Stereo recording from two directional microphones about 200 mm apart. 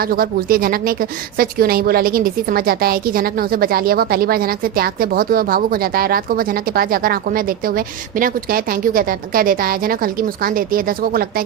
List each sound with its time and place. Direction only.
0.0 s speech: 45° right (ahead or behind)